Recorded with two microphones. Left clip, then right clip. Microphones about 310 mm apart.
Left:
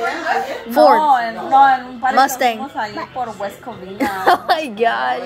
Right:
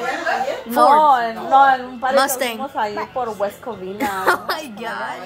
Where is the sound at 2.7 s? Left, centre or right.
Right.